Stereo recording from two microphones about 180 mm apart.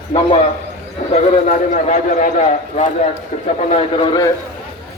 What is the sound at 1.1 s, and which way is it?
A man's voice, 40° left (ahead or behind).